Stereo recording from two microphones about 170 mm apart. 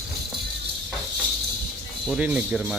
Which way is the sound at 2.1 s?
5° right (ahead or behind).